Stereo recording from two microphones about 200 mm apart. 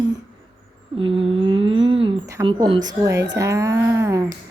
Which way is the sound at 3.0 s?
15° right (ahead or behind).